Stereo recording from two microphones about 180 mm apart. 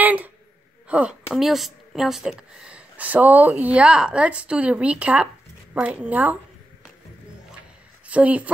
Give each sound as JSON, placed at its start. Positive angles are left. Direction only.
{"t": 0.0, "sound": "a sound", "side_deg": -10}
{"t": 0.8, "sound": "speech", "side_deg": -5}
{"t": 8.1, "sound": "speech", "side_deg": -10}